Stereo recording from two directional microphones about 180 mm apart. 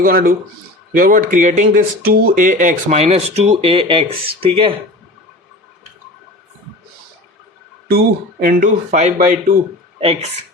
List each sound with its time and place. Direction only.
0.0 s speech: 55° right (ahead or behind); by 4.8 s 30° right (ahead or behind)
7.9 s speech: 55° right (ahead or behind)